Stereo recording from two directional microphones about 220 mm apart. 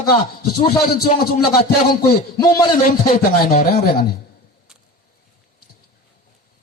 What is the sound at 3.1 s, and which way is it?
Speech, 40° left (ahead or behind).